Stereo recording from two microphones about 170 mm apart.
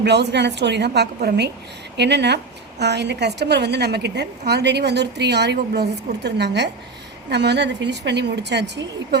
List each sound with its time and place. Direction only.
0.0 s a woman's voice: 85° right
2.0 s a woman's voice: 90° right